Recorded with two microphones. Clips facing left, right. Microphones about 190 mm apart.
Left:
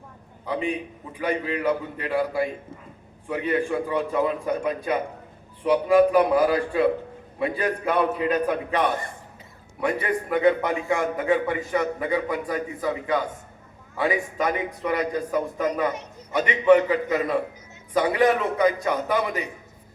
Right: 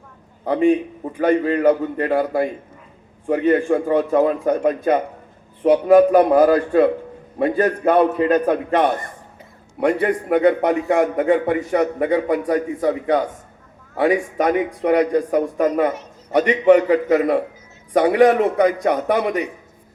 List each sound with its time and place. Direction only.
0.4 s a man's voice: 50° right (ahead or behind)
9.8 s a man's voice: 70° right (ahead or behind)